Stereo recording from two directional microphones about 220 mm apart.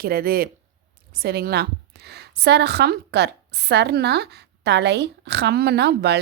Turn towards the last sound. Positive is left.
turn(degrees=-50)  # may be behind; listen again after turning